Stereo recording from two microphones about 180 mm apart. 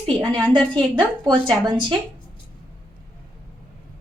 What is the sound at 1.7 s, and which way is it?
Speech, 25° right (ahead or behind).